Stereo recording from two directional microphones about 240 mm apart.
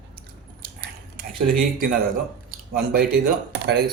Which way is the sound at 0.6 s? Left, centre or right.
Right.